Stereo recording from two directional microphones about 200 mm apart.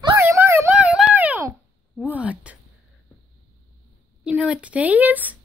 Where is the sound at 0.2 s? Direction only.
10° right (ahead or behind).